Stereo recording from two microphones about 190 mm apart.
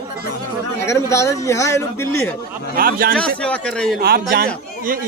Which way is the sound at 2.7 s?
50° right (ahead or behind).